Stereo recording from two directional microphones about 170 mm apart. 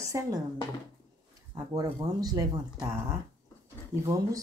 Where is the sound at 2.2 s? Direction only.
20° right (ahead or behind).